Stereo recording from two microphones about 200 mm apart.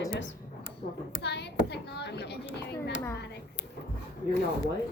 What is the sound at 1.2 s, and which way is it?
Speech, 55° left (ahead or behind).